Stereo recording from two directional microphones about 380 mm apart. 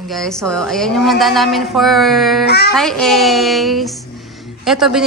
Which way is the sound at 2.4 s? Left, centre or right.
Left.